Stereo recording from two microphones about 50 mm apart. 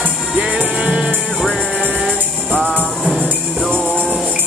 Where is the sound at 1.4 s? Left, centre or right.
Centre.